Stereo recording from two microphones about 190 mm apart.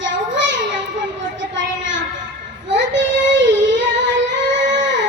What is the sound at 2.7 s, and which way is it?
Child singing, 70° right (ahead or behind).